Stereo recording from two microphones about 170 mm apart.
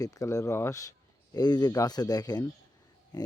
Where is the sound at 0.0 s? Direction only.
20° left (ahead or behind).